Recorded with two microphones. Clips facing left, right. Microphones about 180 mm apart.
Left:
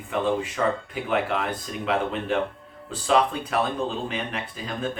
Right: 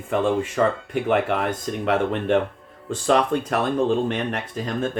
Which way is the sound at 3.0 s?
50° right (ahead or behind).